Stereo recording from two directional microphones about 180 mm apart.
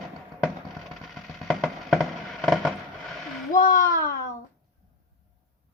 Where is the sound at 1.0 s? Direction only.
Centre (ahead or behind).